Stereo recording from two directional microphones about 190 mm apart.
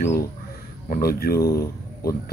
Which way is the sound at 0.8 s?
50° left (ahead or behind).